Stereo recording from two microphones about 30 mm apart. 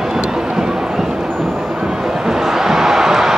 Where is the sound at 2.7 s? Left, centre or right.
Centre.